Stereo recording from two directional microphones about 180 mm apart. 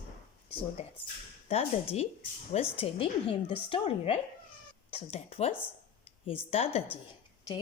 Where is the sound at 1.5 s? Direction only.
35° left (ahead or behind).